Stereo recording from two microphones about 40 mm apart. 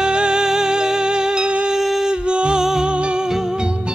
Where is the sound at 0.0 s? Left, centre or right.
Right.